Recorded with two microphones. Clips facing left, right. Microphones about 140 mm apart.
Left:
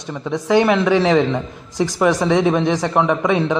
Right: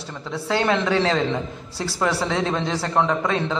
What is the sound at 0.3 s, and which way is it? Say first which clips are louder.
A man's voice: left 6 dB; 15° left (ahead or behind).